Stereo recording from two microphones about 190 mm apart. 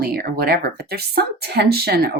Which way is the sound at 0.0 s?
50° right (ahead or behind).